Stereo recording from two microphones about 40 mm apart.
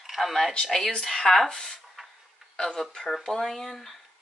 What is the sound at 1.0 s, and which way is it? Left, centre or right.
Speech, centre.